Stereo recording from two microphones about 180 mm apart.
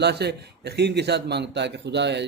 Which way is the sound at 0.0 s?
65° right (ahead or behind).